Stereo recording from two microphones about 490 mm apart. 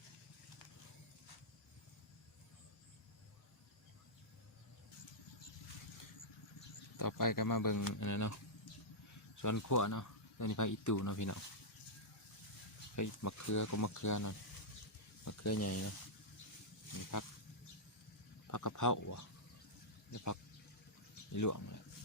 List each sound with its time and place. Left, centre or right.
6.9 s speech: left
13.0 s speech: left
15.2 s a sound: left
16.9 s speech: left
18.5 s speech: left
20.1 s a sound: left
21.3 s speech: left